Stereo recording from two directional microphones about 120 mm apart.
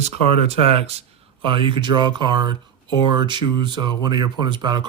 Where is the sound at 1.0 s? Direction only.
45° right (ahead or behind).